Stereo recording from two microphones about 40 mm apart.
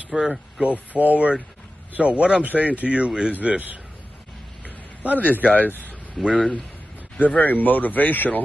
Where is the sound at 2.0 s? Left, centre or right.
Right.